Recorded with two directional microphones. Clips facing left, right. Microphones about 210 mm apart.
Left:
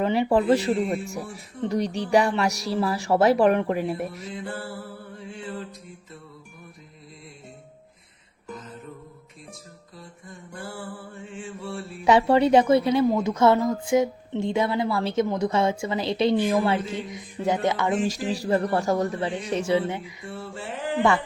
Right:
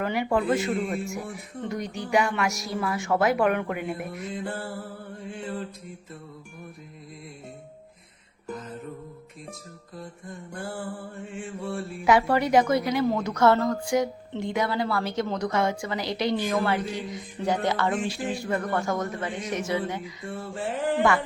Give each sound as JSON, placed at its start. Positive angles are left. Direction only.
{"t": 0.0, "sound": "speech", "side_deg": 25}
{"t": 4.1, "sound": "mantra", "side_deg": -55}
{"t": 10.0, "sound": "mantra", "side_deg": -55}
{"t": 12.0, "sound": "a woman's voice", "side_deg": 30}
{"t": 18.0, "sound": "speech", "side_deg": 40}
{"t": 20.4, "sound": "mantra", "side_deg": -50}